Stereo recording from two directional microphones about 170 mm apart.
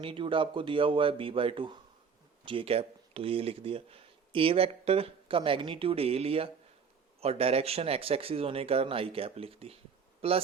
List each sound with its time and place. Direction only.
0.0 s speech: 30° right (ahead or behind)